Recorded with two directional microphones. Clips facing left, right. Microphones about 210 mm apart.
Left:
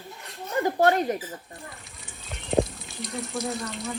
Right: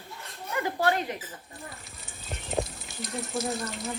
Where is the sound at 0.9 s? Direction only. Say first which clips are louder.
Left 5 dB; 45° left (ahead or behind).